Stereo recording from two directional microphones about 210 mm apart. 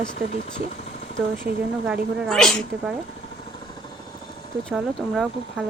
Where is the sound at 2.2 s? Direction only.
Centre (ahead or behind).